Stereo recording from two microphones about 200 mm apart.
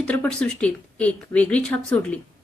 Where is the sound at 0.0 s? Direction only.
5° left (ahead or behind).